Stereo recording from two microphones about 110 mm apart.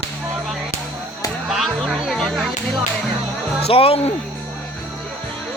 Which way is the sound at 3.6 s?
60° left (ahead or behind).